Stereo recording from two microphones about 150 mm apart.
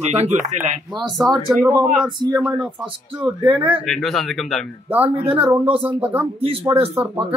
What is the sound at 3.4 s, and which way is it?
Speech, 35° right (ahead or behind).